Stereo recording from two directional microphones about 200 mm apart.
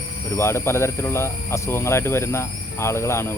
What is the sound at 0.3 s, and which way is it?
A man's voice, 15° left (ahead or behind).